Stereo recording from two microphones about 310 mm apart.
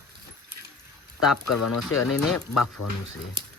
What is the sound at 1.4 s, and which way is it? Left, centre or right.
Speech, left.